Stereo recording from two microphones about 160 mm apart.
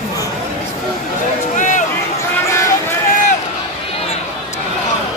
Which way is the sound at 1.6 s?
50° left (ahead or behind).